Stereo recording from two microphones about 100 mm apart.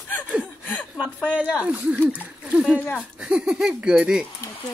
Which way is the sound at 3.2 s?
10° right (ahead or behind).